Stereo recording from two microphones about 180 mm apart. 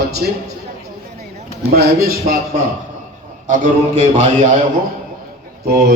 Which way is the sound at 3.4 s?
40° right (ahead or behind).